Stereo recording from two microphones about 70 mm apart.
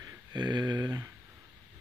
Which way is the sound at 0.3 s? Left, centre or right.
Right.